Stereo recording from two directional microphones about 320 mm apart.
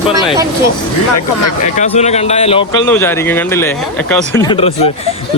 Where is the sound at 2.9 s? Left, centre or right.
Centre.